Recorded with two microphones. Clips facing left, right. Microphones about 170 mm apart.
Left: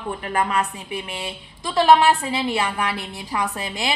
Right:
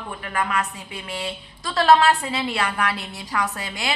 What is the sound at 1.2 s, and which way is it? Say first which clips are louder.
A woman's voice: even; 15° left (ahead or behind).